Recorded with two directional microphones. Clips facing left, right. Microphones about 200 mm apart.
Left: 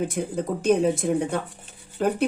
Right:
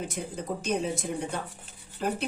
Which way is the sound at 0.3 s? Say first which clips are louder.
Left 9 dB; 55° left (ahead or behind).